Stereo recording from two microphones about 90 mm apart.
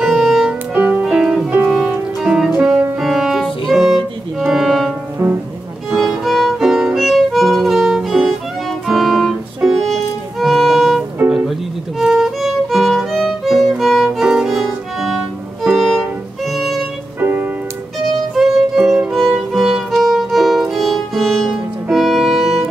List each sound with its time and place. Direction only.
0.0 s music: 5° right (ahead or behind)
0.7 s music: 20° right (ahead or behind); by 4.9 s centre (ahead or behind)
5.2 s music: 25° right (ahead or behind)
5.9 s violin: centre (ahead or behind)
11.2 s music: 10° right (ahead or behind)
17.2 s music: 20° right (ahead or behind)
18.3 s music: 5° right (ahead or behind)